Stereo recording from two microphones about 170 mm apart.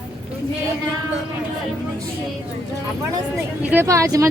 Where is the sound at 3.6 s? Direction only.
10° right (ahead or behind).